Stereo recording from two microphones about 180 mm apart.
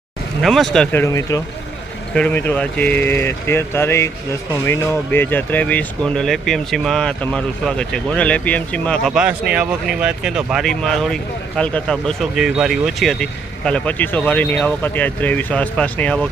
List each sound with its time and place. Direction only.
0.4 s speech: centre (ahead or behind)
1.0 s speech: 15° left (ahead or behind)